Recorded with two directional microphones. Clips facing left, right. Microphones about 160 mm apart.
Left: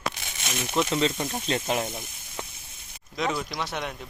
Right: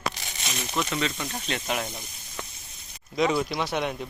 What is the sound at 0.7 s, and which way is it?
Speech, 5° left (ahead or behind).